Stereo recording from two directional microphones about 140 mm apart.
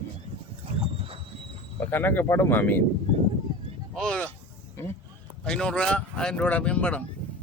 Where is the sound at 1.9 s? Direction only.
15° left (ahead or behind).